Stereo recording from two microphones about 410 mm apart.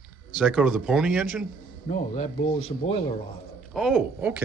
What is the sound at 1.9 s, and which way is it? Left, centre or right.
Speech, centre.